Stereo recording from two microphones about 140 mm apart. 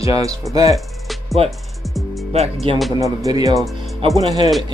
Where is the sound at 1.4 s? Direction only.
45° right (ahead or behind).